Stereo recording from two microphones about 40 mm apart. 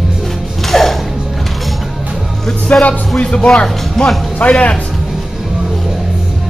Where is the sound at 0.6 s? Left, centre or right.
Centre.